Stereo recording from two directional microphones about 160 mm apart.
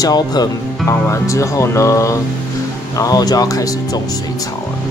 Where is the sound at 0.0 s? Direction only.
25° left (ahead or behind).